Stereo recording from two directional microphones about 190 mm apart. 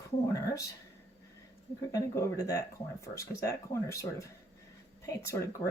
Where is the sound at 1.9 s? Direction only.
15° left (ahead or behind).